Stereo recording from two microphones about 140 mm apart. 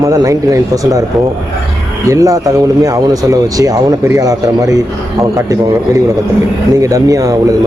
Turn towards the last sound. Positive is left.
turn(degrees=-25)  # may be behind; listen again after turning